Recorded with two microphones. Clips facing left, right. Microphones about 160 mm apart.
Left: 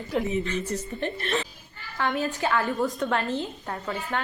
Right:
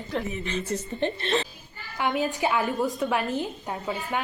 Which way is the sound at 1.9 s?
15° right (ahead or behind).